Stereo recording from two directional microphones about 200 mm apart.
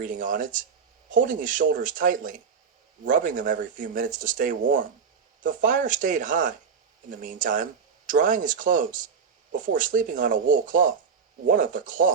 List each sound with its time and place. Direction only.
0.0 s speech: 40° right (ahead or behind)